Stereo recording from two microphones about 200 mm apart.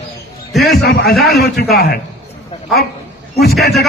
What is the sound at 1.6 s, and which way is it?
Speech, 50° left (ahead or behind).